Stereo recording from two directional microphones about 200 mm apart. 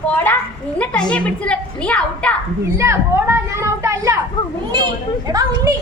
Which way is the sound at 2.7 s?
15° right (ahead or behind).